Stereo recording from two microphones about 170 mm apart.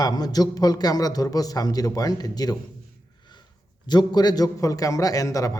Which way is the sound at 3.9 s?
25° left (ahead or behind).